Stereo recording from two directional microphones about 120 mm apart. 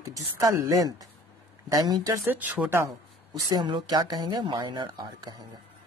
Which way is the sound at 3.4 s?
40° right (ahead or behind).